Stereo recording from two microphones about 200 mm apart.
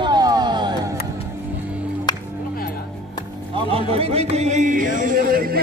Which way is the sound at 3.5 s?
30° right (ahead or behind).